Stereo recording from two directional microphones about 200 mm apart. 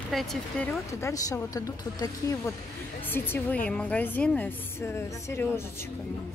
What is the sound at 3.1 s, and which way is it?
Speech, 10° left (ahead or behind).